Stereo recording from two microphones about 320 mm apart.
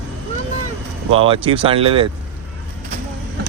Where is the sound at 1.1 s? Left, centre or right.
Centre.